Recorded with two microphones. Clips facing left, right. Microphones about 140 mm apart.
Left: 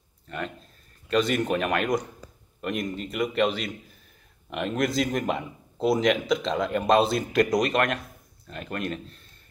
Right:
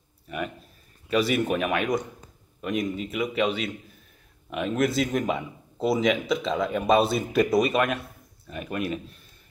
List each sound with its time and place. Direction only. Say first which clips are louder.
0.3 s a man's voice: right 2 dB; 10° right (ahead or behind)